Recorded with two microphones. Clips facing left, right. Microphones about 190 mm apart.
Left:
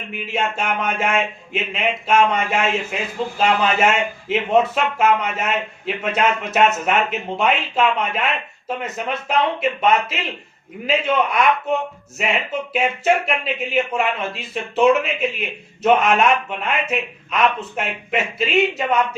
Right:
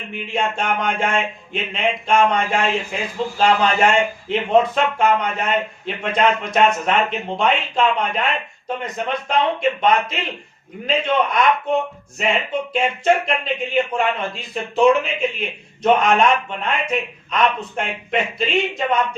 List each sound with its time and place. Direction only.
0.1 s a man's voice: 5° left (ahead or behind)